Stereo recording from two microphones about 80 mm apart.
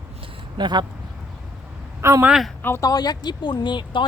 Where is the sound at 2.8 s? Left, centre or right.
Left.